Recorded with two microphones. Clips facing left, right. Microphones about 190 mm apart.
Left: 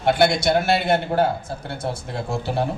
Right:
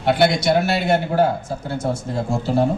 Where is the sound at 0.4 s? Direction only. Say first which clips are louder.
Right 1 dB; 55° left (ahead or behind).